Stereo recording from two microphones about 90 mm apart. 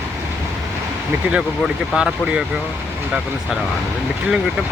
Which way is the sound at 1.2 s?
20° right (ahead or behind).